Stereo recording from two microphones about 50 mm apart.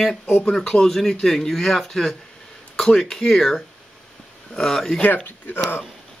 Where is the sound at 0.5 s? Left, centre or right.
Centre.